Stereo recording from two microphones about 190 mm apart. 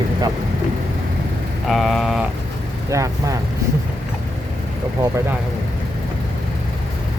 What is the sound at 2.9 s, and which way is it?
Speech, 15° right (ahead or behind).